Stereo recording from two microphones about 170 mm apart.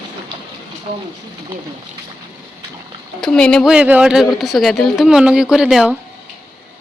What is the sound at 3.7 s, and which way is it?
Speech, 10° right (ahead or behind).